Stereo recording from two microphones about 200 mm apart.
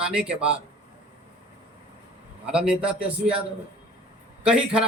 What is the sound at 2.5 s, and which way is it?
Speech, 5° right (ahead or behind).